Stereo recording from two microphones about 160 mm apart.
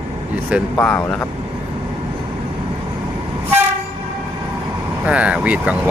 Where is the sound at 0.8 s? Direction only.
10° left (ahead or behind).